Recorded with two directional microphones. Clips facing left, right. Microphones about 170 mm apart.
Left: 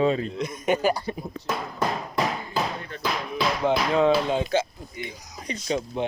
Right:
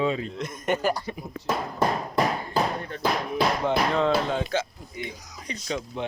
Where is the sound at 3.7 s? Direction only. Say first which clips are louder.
Left 6 dB; 10° left (ahead or behind).